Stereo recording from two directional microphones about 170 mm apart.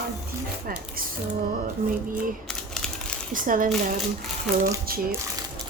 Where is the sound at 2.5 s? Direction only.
5° left (ahead or behind).